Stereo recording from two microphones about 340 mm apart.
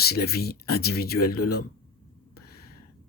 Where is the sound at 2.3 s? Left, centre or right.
Left.